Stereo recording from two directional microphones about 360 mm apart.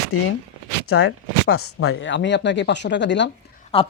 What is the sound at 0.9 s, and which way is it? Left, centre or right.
Speech, left.